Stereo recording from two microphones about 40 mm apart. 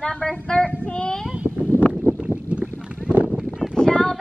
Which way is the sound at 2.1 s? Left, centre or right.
Right.